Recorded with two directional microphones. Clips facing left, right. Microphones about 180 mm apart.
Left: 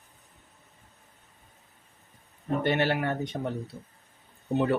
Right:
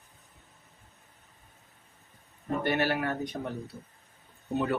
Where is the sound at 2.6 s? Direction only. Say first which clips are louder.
Left 2 dB; 25° left (ahead or behind).